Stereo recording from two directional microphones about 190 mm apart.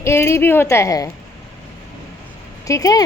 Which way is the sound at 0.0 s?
15° left (ahead or behind).